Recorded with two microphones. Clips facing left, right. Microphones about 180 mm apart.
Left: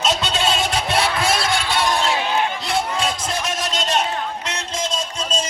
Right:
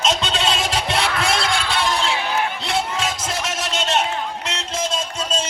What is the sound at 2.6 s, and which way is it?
Music, centre (ahead or behind).